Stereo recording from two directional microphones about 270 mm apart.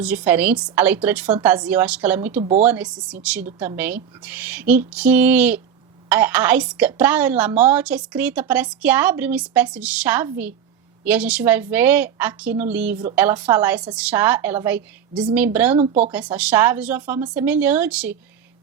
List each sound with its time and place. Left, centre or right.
0.0 s speech: centre
2.4 s speech: right
2.6 s a woman's voice: centre